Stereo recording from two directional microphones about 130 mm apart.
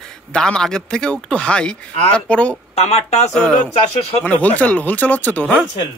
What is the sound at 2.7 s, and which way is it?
Speech, 55° left (ahead or behind).